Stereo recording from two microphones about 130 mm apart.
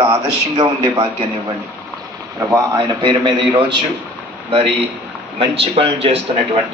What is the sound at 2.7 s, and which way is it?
Speech, 40° right (ahead or behind).